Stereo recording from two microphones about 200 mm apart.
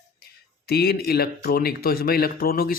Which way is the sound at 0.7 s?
50° left (ahead or behind).